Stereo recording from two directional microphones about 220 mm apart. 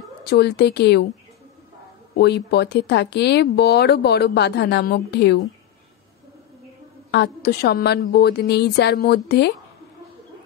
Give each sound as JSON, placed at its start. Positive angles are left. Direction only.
{"t": 0.3, "sound": "speech", "side_deg": 50}
{"t": 2.1, "sound": "speech", "side_deg": 50}
{"t": 7.1, "sound": "speech", "side_deg": 50}